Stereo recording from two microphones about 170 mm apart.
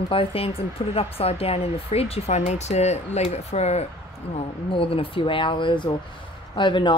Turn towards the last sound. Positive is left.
turn(degrees=30)  # may be behind; listen again after turning